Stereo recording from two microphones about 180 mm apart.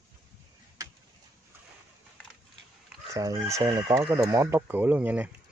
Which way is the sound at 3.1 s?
15° right (ahead or behind).